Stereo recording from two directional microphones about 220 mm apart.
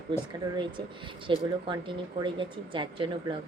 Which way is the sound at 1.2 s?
20° right (ahead or behind).